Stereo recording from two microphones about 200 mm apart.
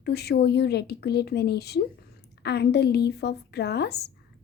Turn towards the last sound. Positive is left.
turn(degrees=55)  # may be behind; listen again after turning